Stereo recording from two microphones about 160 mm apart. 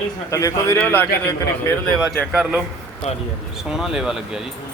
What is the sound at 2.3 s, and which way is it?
Speech, 5° right (ahead or behind).